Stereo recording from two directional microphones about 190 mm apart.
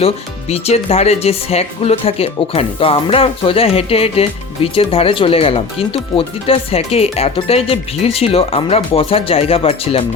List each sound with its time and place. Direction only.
0.5 s speech: 35° left (ahead or behind)